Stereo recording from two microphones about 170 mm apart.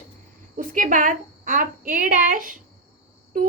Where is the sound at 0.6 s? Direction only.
50° right (ahead or behind).